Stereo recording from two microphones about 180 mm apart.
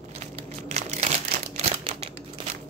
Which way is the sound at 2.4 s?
25° right (ahead or behind).